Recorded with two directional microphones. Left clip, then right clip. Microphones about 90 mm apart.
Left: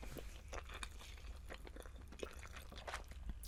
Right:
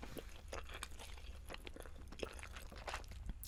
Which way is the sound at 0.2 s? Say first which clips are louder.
Right 1 dB; 45° right (ahead or behind).